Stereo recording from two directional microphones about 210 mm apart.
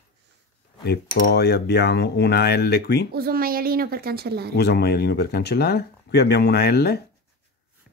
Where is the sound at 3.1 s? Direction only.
45° right (ahead or behind).